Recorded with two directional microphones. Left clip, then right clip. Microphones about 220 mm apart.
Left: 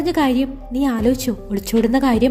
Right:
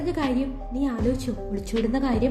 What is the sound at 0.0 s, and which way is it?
A woman's voice, 45° left (ahead or behind).